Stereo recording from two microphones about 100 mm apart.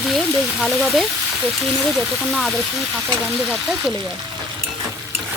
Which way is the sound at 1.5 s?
Centre (ahead or behind).